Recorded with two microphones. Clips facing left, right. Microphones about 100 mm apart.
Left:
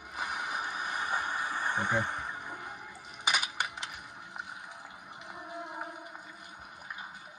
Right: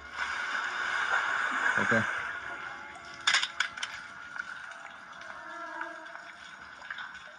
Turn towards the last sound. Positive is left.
turn(degrees=10)  # may be behind; listen again after turning